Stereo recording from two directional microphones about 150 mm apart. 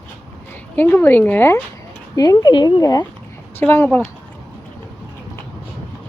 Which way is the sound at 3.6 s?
15° left (ahead or behind).